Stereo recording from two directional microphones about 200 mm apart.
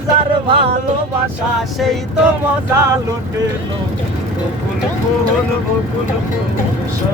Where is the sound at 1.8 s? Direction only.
5° right (ahead or behind).